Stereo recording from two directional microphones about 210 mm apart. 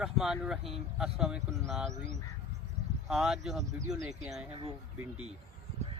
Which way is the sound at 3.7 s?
15° right (ahead or behind).